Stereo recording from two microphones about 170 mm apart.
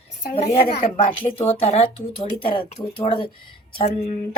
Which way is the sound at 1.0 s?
35° left (ahead or behind).